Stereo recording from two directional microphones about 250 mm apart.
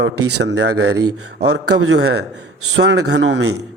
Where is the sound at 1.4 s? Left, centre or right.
Right.